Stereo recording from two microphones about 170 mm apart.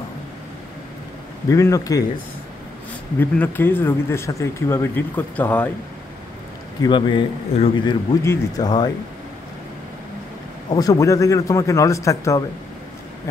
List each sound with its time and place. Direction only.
1.5 s a man's voice: 20° left (ahead or behind)
3.2 s speech: 10° left (ahead or behind)
6.8 s a man's voice: 30° left (ahead or behind)
10.7 s a man's voice: 20° left (ahead or behind)